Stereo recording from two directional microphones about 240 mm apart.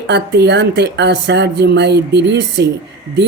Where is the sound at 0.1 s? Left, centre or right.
Right.